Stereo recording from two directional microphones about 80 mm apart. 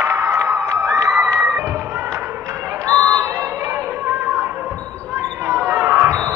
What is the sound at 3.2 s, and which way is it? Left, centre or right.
Crowd, right.